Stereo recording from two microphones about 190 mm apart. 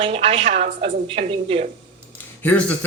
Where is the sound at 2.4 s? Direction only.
10° left (ahead or behind).